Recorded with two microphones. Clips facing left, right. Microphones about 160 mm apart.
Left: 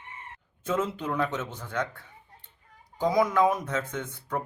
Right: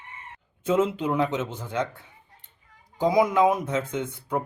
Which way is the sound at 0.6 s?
20° right (ahead or behind).